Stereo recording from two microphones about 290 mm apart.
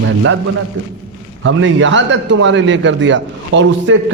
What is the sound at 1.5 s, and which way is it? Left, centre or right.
A man's voice, right.